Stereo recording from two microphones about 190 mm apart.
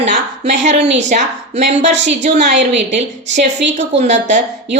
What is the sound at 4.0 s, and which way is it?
Speech, 40° right (ahead or behind).